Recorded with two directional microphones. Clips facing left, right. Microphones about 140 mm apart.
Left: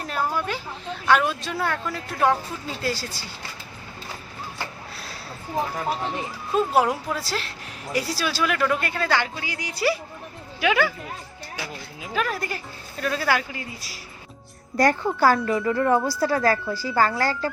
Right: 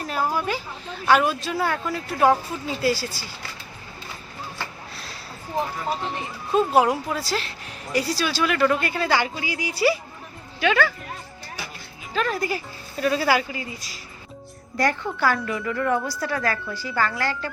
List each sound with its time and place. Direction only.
0.1 s a sound: 5° right (ahead or behind)
1.0 s speech: 5° right (ahead or behind)
6.5 s speech: centre (ahead or behind)
10.6 s speech: 10° left (ahead or behind)
12.1 s speech: 5° left (ahead or behind)
14.8 s a woman's voice: 40° left (ahead or behind)
15.4 s a woman's voice: 30° left (ahead or behind)